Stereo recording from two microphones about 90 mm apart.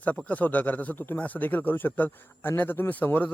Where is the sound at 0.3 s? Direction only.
15° left (ahead or behind).